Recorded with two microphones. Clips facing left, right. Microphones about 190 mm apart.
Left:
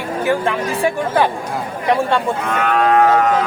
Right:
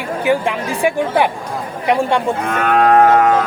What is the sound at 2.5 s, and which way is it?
Livestock, 45° right (ahead or behind).